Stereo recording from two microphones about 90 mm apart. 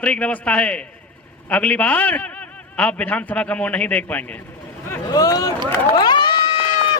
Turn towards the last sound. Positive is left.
turn(degrees=85)